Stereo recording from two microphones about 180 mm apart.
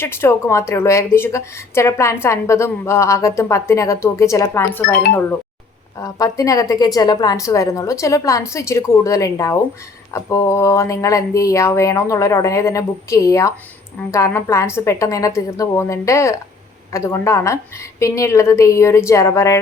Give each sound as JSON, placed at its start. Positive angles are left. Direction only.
{"t": 0.0, "sound": "a woman's voice", "side_deg": 15}
{"t": 6.0, "sound": "a woman's voice", "side_deg": 20}